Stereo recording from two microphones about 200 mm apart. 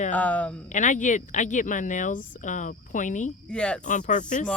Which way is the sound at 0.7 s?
40° left (ahead or behind).